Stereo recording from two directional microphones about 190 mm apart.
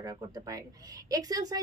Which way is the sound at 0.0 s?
20° right (ahead or behind).